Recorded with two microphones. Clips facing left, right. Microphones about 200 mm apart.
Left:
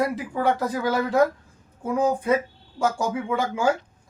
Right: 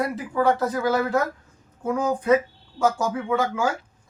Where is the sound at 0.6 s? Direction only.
15° left (ahead or behind).